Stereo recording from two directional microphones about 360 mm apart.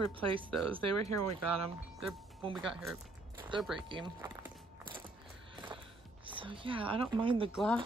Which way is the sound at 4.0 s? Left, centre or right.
Centre.